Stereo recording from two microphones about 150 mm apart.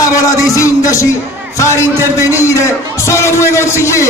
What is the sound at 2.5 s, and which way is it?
Speech, 20° left (ahead or behind).